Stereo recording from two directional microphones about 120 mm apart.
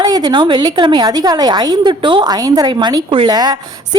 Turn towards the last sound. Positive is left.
turn(degrees=-35)  # may be behind; listen again after turning